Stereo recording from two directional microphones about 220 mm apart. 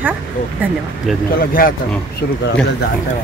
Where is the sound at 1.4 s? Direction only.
40° left (ahead or behind).